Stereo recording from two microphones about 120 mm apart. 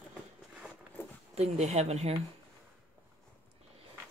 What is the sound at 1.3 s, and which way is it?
Speech, 65° right (ahead or behind).